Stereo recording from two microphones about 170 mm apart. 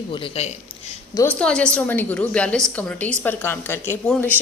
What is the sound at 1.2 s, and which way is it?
A woman's voice, 10° left (ahead or behind).